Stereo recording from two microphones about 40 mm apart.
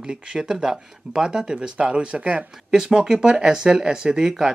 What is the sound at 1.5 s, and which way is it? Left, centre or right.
Speech, right.